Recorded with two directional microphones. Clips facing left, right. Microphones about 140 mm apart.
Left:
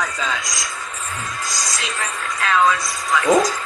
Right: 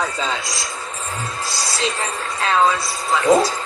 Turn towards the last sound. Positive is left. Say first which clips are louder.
# right 1 dB
turn(degrees=-30)  # may be behind; listen again after turning